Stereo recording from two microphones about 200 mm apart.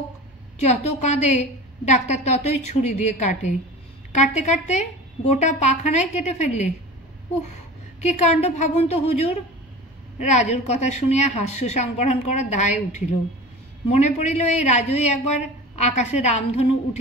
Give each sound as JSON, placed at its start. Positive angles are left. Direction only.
{"t": 0.6, "sound": "a woman's voice", "side_deg": 35}
{"t": 8.0, "sound": "a woman's voice", "side_deg": 35}